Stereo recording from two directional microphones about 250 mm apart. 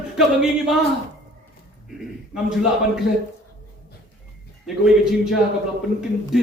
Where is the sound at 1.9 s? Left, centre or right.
Centre.